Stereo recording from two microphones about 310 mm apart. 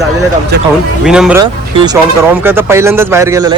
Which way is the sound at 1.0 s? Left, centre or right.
Centre.